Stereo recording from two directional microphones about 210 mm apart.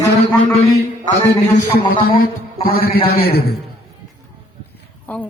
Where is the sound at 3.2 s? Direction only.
50° left (ahead or behind).